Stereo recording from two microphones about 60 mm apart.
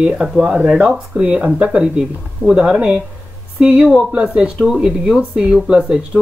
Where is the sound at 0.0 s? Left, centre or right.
Centre.